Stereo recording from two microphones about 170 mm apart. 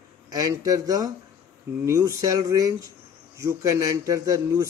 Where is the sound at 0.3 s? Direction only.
20° right (ahead or behind).